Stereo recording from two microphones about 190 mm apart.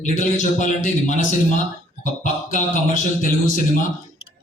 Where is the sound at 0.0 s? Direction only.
40° left (ahead or behind).